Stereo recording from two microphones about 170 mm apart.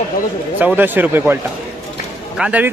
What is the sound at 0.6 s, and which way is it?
Speech, 10° right (ahead or behind).